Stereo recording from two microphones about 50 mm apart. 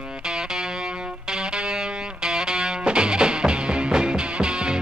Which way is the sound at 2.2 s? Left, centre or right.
Centre.